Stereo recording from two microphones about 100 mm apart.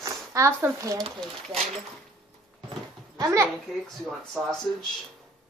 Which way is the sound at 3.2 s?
35° right (ahead or behind).